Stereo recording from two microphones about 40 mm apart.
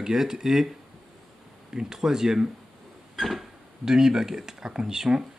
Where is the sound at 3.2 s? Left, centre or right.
Centre.